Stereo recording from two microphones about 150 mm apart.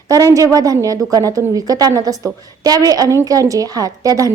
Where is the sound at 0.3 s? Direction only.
25° right (ahead or behind).